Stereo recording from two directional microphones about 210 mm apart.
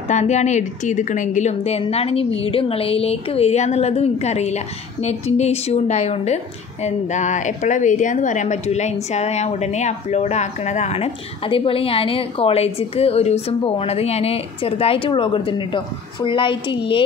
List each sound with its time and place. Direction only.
0.1 s a woman's voice: 35° left (ahead or behind)